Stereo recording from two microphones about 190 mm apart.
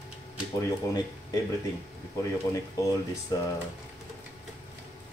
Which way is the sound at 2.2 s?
20° left (ahead or behind).